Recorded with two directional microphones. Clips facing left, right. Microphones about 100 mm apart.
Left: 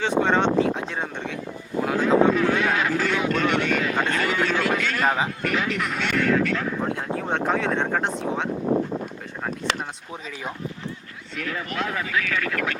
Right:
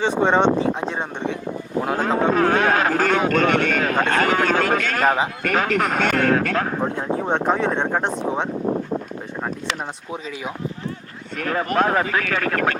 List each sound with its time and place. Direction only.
0.0 s speech: 20° right (ahead or behind)
2.0 s speech: 50° right (ahead or behind)
7.3 s speech: 20° right (ahead or behind)
11.3 s speech: 45° right (ahead or behind)